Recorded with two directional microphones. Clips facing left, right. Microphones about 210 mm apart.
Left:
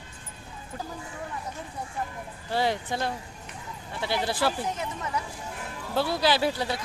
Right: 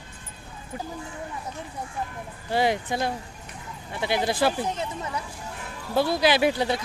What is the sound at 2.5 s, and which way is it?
Speech, 15° right (ahead or behind).